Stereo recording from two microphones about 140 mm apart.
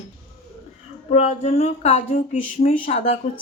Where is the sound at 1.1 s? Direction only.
55° left (ahead or behind).